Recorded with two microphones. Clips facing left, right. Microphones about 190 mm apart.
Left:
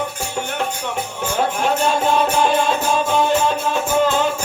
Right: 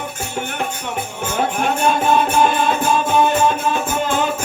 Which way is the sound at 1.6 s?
55° right (ahead or behind).